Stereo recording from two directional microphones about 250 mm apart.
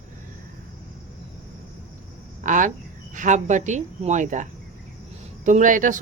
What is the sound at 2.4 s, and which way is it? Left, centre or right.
Speech, right.